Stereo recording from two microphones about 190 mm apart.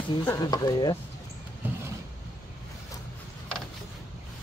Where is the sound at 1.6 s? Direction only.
10° right (ahead or behind).